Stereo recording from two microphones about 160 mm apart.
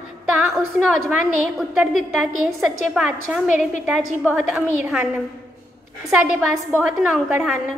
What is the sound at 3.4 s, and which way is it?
Speech, 50° left (ahead or behind).